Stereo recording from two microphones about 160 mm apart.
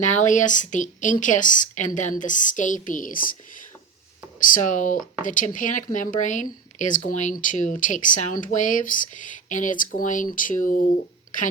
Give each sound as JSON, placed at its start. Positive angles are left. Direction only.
{"t": 0.0, "sound": "speech", "side_deg": 50}
{"t": 4.4, "sound": "speech", "side_deg": 55}